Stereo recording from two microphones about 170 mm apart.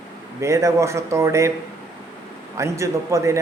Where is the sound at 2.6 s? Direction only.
15° right (ahead or behind).